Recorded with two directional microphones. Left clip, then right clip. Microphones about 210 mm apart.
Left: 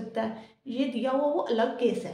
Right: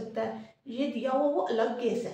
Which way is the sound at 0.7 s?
45° left (ahead or behind).